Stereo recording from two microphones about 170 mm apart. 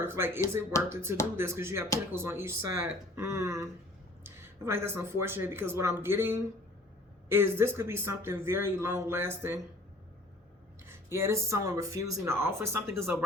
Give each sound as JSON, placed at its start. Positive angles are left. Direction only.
{"t": 0.0, "sound": "speech", "side_deg": -15}
{"t": 0.7, "sound": "speech", "side_deg": 15}
{"t": 1.4, "sound": "speech", "side_deg": -15}
{"t": 10.8, "sound": "speech", "side_deg": -15}